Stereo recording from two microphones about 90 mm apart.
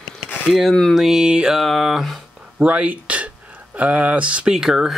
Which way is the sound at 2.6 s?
15° right (ahead or behind).